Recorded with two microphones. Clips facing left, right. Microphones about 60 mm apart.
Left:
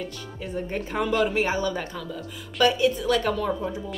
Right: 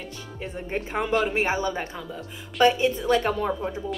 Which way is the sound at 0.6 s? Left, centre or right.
Right.